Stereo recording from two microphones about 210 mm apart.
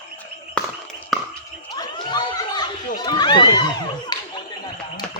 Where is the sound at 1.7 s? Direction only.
20° left (ahead or behind).